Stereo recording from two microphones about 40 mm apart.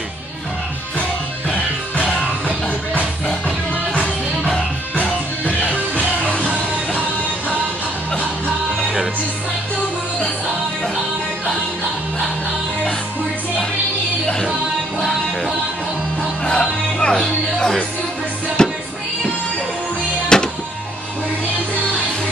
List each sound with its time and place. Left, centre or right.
3.4 s music: left
5.7 s music: left
16.4 s music: left
18.6 s music: centre
20.3 s music: left